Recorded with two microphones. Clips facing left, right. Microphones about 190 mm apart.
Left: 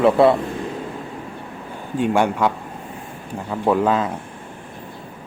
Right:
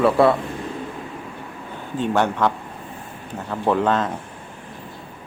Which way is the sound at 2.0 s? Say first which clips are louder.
Left 2 dB; 10° left (ahead or behind).